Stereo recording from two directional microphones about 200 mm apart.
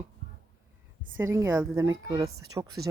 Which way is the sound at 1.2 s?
15° right (ahead or behind).